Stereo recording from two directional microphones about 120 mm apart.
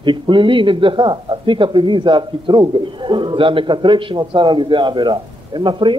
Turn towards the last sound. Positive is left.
turn(degrees=-40)  # may be behind; listen again after turning